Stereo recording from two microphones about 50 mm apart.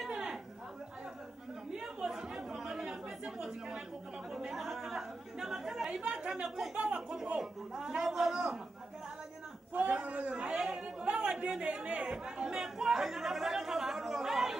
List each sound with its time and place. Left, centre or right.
0.0 s a sound: centre
2.0 s chatter: centre
5.9 s a man's voice: centre
9.8 s chatter: right; by 14.6 s centre